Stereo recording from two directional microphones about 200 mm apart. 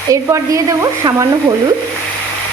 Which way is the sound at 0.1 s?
15° right (ahead or behind).